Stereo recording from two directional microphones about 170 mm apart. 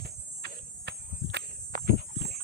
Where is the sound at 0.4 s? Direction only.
90° right.